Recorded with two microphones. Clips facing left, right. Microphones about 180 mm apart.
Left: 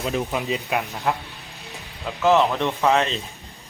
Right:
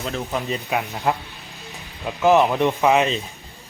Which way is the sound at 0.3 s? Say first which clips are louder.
Even; centre (ahead or behind).